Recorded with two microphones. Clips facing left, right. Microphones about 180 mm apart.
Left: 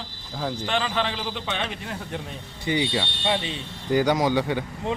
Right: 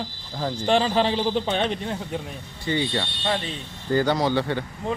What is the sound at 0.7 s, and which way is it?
A man's voice, 35° right (ahead or behind).